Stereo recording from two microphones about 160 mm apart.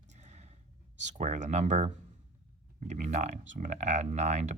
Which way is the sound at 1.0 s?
45° right (ahead or behind).